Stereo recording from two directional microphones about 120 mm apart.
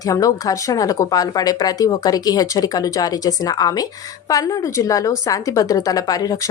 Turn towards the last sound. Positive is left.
turn(degrees=30)  # may be behind; listen again after turning